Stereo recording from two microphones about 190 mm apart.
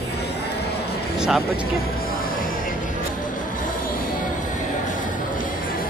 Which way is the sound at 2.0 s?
45° left (ahead or behind).